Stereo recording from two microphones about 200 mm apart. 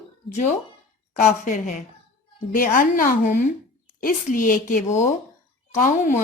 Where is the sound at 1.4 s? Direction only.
35° left (ahead or behind).